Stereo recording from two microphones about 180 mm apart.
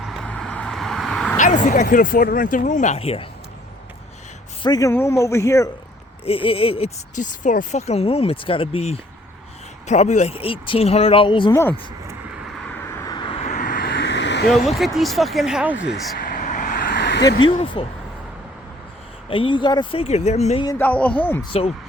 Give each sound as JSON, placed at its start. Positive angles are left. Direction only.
{"t": 0.0, "sound": "vehicle", "side_deg": 0}
{"t": 1.4, "sound": "speech", "side_deg": 45}
{"t": 4.6, "sound": "a man's voice", "side_deg": 20}
{"t": 6.2, "sound": "speech", "side_deg": 30}
{"t": 7.2, "sound": "speech", "side_deg": 45}
{"t": 13.1, "sound": "vehicle", "side_deg": 25}
{"t": 14.9, "sound": "speech", "side_deg": 0}
{"t": 15.9, "sound": "vehicle", "side_deg": 55}
{"t": 17.4, "sound": "speech", "side_deg": 30}
{"t": 19.3, "sound": "speech", "side_deg": 30}
{"t": 20.7, "sound": "a man's voice", "side_deg": 10}